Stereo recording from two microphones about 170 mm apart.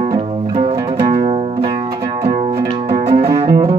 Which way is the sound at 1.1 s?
40° right (ahead or behind).